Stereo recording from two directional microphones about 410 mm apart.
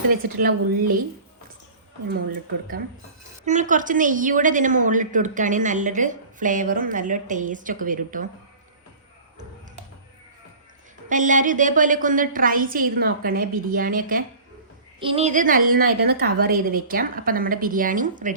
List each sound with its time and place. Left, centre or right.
0.1 s a woman's voice: right
3.4 s a woman's voice: centre
11.1 s a woman's voice: centre